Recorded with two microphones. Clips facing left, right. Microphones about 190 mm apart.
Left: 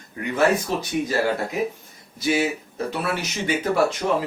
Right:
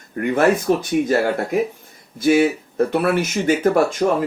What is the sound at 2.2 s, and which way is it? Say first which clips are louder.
Speech: right 7 dB; 50° right (ahead or behind).